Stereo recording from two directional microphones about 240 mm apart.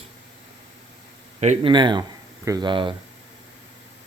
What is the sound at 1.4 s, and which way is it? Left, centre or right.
Speech, right.